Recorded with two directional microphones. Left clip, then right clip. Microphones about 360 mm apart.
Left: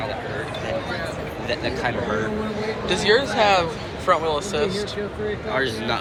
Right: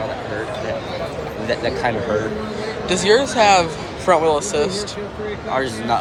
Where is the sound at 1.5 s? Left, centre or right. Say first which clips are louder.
Right 4 dB; right.